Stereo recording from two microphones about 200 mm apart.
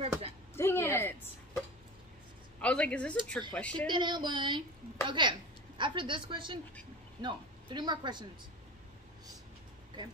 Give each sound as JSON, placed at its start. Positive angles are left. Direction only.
{"t": 0.6, "sound": "a sound", "side_deg": 10}
{"t": 2.6, "sound": "speech", "side_deg": 5}
{"t": 3.8, "sound": "a woman's voice", "side_deg": -20}